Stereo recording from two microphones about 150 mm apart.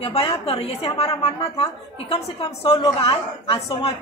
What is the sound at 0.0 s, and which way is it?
A woman's voice, 40° left (ahead or behind).